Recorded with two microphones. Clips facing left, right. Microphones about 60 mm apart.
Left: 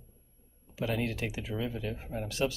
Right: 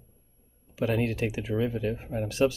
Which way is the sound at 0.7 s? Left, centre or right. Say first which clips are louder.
Right 5 dB; right.